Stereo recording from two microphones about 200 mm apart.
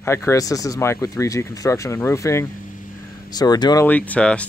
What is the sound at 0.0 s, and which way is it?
Speech, 15° left (ahead or behind).